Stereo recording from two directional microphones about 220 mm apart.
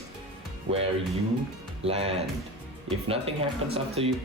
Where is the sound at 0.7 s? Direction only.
60° right (ahead or behind).